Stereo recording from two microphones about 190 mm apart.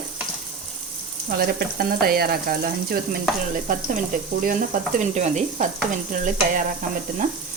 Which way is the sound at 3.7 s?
45° right (ahead or behind).